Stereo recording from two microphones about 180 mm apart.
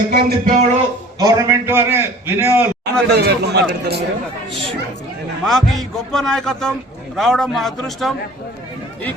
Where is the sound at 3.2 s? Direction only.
65° right (ahead or behind).